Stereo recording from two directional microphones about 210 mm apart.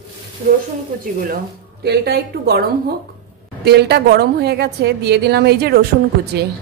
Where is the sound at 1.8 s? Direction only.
50° right (ahead or behind).